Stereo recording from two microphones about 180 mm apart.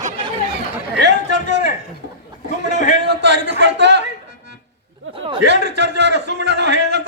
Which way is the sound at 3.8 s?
75° right (ahead or behind).